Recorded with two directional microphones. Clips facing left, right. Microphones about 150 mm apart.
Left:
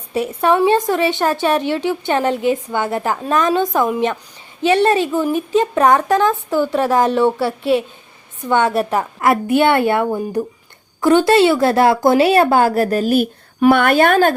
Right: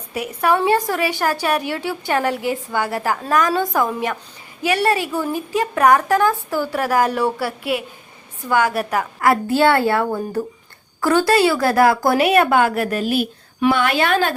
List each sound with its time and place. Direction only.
0.1 s a woman's voice: 25° left (ahead or behind); by 14.3 s 45° left (ahead or behind)